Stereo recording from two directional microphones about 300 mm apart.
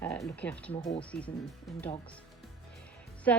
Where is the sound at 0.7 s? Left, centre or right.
Centre.